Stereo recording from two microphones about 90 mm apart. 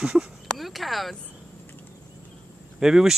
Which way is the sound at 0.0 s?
5° right (ahead or behind).